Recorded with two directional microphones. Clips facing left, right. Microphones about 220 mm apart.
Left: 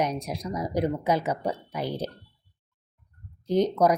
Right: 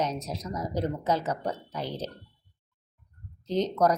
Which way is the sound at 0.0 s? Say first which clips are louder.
Left 3 dB; 10° left (ahead or behind).